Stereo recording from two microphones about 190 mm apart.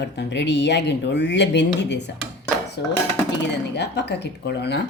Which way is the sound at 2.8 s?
65° left (ahead or behind).